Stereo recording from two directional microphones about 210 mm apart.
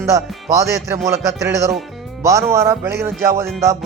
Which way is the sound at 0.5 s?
15° right (ahead or behind).